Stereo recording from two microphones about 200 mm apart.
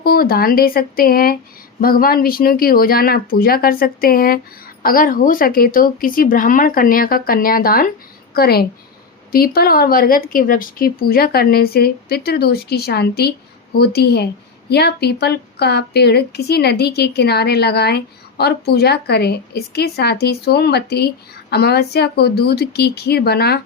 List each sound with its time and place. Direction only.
0.0 s a woman's voice: 50° left (ahead or behind)